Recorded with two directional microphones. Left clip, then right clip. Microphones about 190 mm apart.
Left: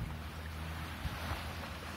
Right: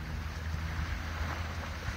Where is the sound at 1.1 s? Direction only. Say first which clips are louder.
Right 1 dB; 35° right (ahead or behind).